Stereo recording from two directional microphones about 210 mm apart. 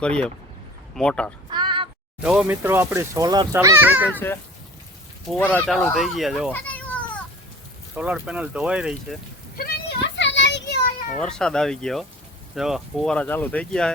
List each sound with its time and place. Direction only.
0.0 s speech: 5° left (ahead or behind)
1.5 s a sound: 20° right (ahead or behind)
2.2 s speech: 5° right (ahead or behind)
5.3 s speech: 5° left (ahead or behind)
7.9 s speech: 5° right (ahead or behind)
9.6 s child singing: 50° left (ahead or behind)
11.2 s speech: 5° left (ahead or behind)